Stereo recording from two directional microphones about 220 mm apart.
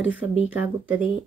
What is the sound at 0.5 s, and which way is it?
Speech, 5° right (ahead or behind).